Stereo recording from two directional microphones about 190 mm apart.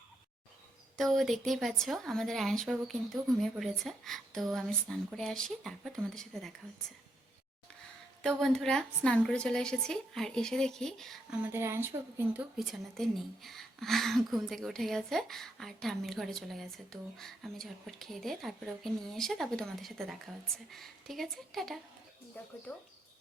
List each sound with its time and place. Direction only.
0.9 s speech: centre (ahead or behind)
8.2 s speech: centre (ahead or behind)
11.4 s speech: 15° right (ahead or behind)
12.5 s speech: centre (ahead or behind)